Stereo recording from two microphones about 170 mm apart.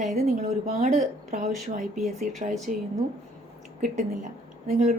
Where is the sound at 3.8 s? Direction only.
50° right (ahead or behind).